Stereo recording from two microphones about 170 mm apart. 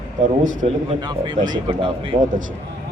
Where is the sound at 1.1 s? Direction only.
25° right (ahead or behind).